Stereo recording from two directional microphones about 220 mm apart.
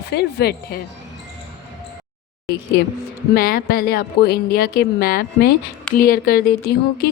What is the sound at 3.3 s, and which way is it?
A woman's voice, 40° left (ahead or behind).